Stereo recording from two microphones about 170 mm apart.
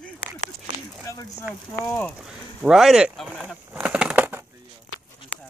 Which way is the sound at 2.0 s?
5° right (ahead or behind).